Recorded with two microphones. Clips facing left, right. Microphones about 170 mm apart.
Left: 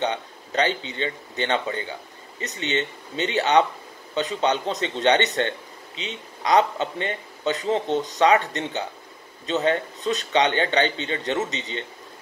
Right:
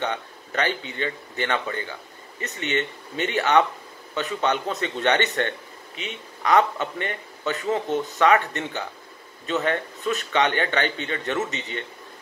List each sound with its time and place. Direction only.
0.0 s speech: 20° left (ahead or behind)
6.5 s speech: 20° left (ahead or behind)